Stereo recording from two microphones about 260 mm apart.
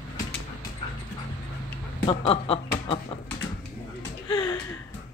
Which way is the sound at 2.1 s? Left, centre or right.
Centre.